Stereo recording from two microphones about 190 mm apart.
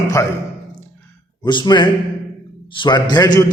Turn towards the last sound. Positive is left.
turn(degrees=20)  # may be behind; listen again after turning